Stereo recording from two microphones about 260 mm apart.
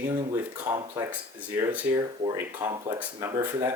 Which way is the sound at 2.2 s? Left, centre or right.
Centre.